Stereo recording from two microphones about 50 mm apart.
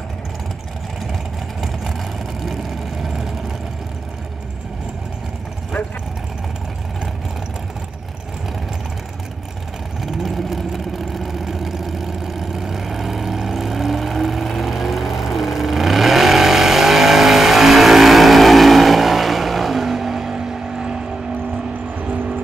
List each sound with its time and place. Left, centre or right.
2.4 s vehicle: centre
10.0 s vehicle: centre
21.9 s vehicle: right